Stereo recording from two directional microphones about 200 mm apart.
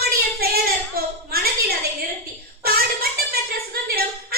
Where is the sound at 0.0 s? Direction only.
50° right (ahead or behind).